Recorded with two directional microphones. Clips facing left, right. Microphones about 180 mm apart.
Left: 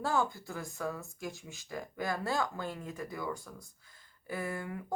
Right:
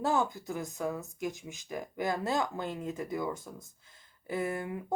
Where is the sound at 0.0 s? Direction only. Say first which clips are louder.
Right 2 dB; 20° right (ahead or behind).